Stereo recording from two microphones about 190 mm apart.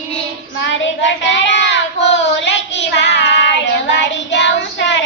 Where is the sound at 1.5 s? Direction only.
70° left (ahead or behind).